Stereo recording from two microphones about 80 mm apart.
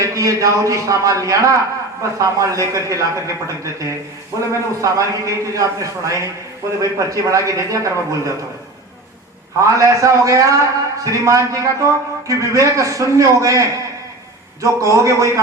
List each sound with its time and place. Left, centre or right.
0.0 s a man's voice: right
9.6 s a man's voice: right